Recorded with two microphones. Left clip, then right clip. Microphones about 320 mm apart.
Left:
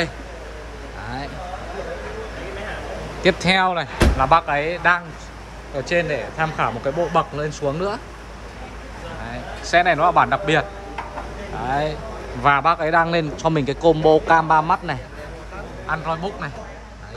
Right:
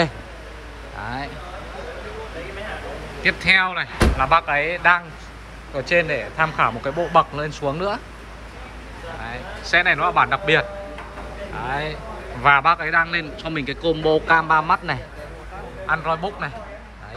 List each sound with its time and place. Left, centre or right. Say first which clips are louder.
3.2 s a man's voice: even; centre
9.2 s a man's voice: even; centre